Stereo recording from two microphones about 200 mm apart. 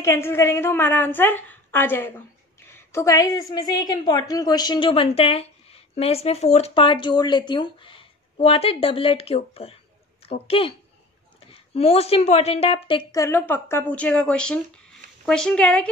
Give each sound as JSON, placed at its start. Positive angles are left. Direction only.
{"t": 0.0, "sound": "a woman's voice", "side_deg": 10}